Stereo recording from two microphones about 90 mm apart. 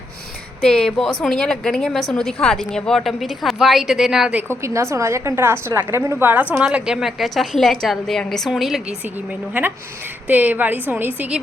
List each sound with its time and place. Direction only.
0.6 s a woman's voice: 5° left (ahead or behind)
4.4 s a woman's voice: 30° right (ahead or behind); by 9.0 s centre (ahead or behind)
9.5 s a woman's voice: 20° right (ahead or behind)